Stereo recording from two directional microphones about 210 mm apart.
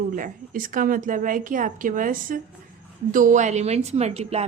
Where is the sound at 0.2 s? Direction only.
40° right (ahead or behind).